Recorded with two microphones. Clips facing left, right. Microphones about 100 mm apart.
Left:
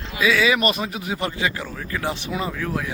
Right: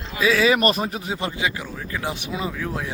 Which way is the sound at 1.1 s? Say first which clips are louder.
Left 3 dB; 20° right (ahead or behind).